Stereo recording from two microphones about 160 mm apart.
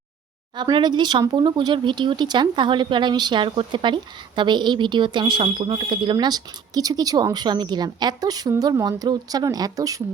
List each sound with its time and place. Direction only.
0.5 s speech: 30° right (ahead or behind)